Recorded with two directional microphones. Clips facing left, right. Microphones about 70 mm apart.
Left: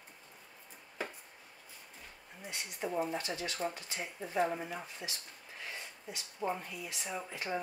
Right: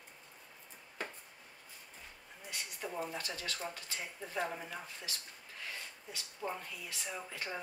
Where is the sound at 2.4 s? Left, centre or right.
Centre.